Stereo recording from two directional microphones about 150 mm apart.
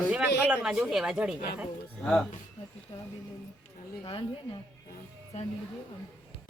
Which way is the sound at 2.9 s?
35° left (ahead or behind).